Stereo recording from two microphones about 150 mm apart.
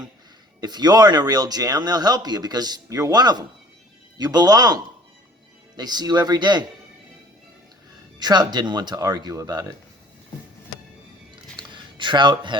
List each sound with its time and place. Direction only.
0.6 s speech: 30° right (ahead or behind)
8.2 s speech: 30° right (ahead or behind)
11.5 s a sound: 30° right (ahead or behind)